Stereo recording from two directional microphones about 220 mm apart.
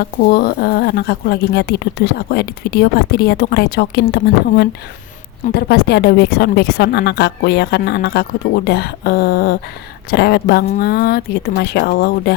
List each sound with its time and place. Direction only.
0.3 s a woman's voice: 45° left (ahead or behind)